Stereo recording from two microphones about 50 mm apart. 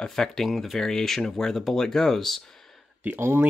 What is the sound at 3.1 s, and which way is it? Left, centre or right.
Speech, right.